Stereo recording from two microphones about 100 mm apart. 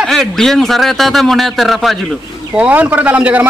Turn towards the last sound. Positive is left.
turn(degrees=-15)  # may be behind; listen again after turning